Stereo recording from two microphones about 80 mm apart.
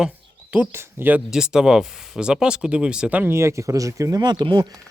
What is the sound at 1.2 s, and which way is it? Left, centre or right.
Speech, centre.